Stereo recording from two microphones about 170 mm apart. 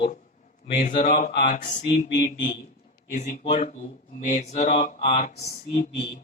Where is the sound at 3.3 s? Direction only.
45° left (ahead or behind); by 6.0 s 25° left (ahead or behind).